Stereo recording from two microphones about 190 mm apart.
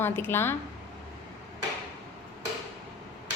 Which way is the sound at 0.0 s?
10° left (ahead or behind).